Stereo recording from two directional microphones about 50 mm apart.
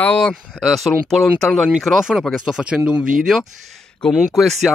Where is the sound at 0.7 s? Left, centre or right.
Centre.